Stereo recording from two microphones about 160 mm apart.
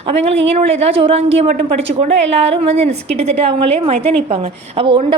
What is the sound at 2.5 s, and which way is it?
A woman's voice, 40° right (ahead or behind).